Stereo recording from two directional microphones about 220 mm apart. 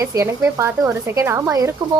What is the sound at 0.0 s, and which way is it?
A woman's voice, 15° right (ahead or behind).